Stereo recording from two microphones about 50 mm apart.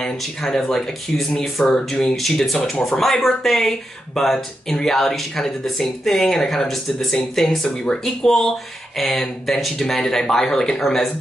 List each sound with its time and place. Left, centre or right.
0.0 s speech: centre
7.6 s speech: centre